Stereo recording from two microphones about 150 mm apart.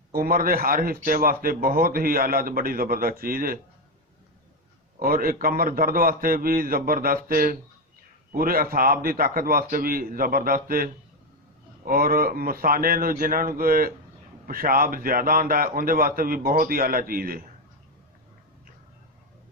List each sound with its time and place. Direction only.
0.1 s speech: 75° right (ahead or behind)
4.9 s speech: 75° right (ahead or behind)
11.9 s speech: 75° right (ahead or behind)